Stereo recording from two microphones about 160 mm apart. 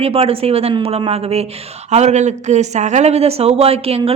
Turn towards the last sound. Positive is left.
turn(degrees=-40)  # may be behind; listen again after turning